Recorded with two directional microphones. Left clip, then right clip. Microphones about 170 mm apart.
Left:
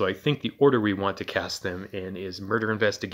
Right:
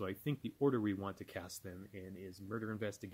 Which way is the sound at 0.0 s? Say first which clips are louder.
Left 17 dB; 40° right (ahead or behind).